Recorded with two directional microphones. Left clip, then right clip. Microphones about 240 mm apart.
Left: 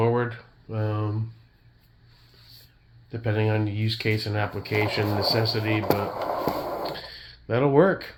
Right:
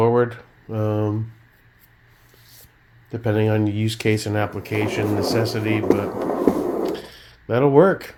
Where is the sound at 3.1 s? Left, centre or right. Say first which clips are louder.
Right 6 dB; right.